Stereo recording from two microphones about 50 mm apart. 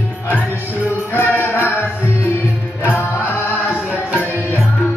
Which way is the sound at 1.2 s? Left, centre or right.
Left.